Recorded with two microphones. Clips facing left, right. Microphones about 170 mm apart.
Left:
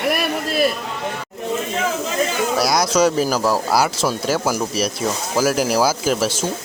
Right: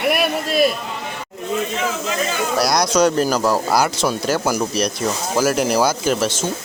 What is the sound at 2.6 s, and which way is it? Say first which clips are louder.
Speech: right 1 dB; 5° left (ahead or behind).